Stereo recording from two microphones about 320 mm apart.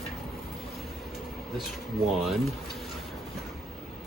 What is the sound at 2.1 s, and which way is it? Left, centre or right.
Speech, centre.